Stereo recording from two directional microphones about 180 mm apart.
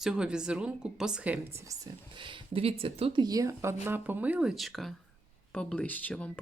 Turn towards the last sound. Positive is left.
turn(degrees=5)  # may be behind; listen again after turning